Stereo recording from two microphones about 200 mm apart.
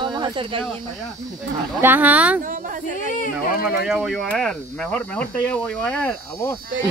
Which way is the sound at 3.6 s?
5° right (ahead or behind).